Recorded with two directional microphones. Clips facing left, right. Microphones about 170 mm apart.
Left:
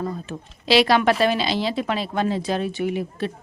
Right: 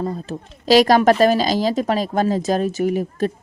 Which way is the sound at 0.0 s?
35° right (ahead or behind).